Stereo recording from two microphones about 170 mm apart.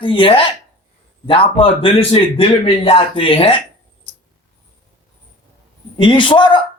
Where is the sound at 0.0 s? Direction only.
30° left (ahead or behind).